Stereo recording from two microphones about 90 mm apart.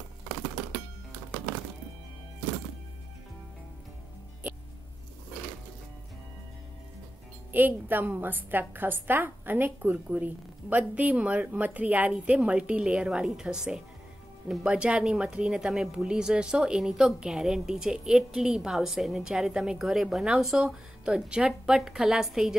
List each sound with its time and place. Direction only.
7.5 s speech: 20° right (ahead or behind); by 22.6 s 5° right (ahead or behind)